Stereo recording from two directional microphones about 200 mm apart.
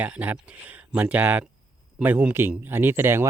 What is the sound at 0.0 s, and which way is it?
Speech, 5° right (ahead or behind).